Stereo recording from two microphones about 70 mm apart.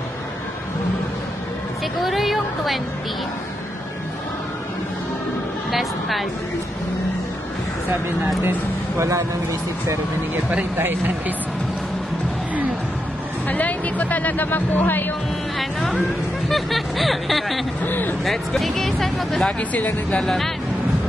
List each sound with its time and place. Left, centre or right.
2.0 s a woman's voice: centre
5.7 s a sound: centre
8.5 s speech: right
10.3 s speech: right
13.5 s speech: left
16.4 s speech: centre
17.8 s speech: left
18.2 s speech: centre
19.7 s speech: left
20.2 s speech: centre